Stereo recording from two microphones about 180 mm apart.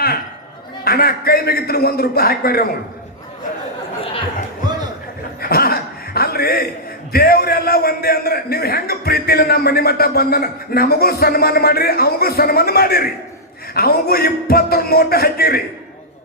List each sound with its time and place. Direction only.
0.9 s a man's voice: 60° left (ahead or behind)
5.4 s chuckle: 55° left (ahead or behind)
7.1 s a man's voice: 60° left (ahead or behind)